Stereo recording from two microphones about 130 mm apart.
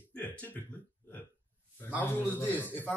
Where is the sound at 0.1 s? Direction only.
15° left (ahead or behind).